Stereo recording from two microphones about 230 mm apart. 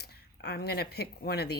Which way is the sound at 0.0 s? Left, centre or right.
Left.